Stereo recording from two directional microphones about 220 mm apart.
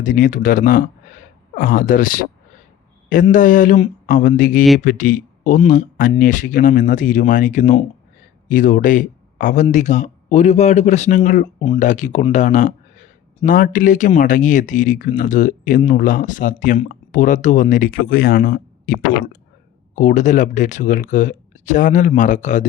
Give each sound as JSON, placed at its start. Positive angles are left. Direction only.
{"t": 0.0, "sound": "speech", "side_deg": 35}